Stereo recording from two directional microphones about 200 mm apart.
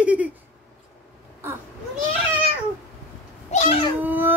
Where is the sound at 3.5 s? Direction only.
35° left (ahead or behind).